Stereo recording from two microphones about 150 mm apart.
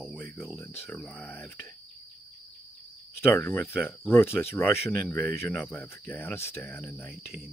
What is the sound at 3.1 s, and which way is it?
Speech, 15° left (ahead or behind).